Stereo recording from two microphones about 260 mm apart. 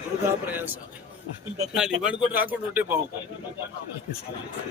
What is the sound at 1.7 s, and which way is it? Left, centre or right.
A man's voice, centre.